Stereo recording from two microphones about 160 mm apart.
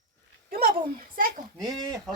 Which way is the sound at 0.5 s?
60° right (ahead or behind).